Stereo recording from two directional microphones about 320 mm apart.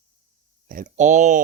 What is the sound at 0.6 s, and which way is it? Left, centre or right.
Speech, right.